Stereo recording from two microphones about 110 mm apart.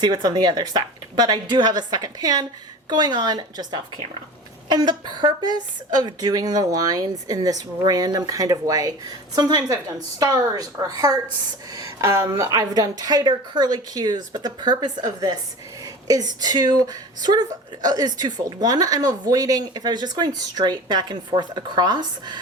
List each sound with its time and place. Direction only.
0.0 s a woman's voice: 40° right (ahead or behind)